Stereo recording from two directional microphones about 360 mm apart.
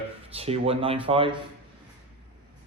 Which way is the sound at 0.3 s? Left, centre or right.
Centre.